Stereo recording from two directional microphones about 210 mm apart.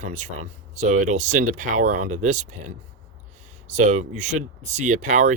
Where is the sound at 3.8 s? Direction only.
35° right (ahead or behind).